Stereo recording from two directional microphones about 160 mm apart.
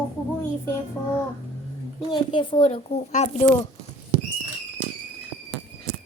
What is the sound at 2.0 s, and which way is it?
A woman's voice, 30° left (ahead or behind).